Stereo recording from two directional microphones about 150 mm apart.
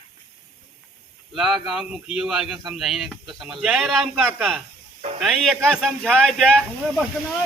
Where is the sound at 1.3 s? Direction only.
5° right (ahead or behind).